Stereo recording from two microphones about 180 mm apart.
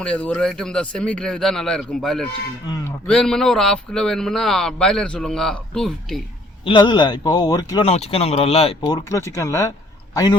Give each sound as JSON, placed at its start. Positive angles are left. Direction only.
{"t": 0.0, "sound": "speech", "side_deg": 5}
{"t": 2.6, "sound": "speech", "side_deg": 20}
{"t": 3.1, "sound": "speech", "side_deg": 5}
{"t": 6.7, "sound": "speech", "side_deg": 25}
{"t": 7.9, "sound": "speech", "side_deg": 35}